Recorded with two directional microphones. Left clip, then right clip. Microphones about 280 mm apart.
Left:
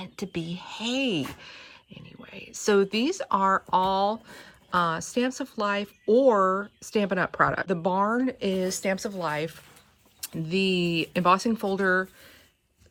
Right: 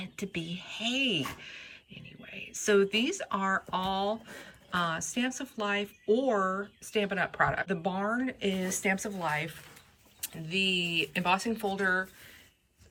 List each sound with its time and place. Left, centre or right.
0.0 s speech: centre
10.5 s speech: centre